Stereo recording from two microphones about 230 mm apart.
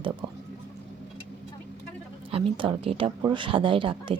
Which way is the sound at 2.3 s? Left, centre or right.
Right.